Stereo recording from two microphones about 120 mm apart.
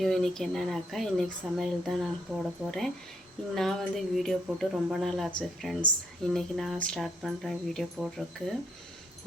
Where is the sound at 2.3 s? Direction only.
25° right (ahead or behind).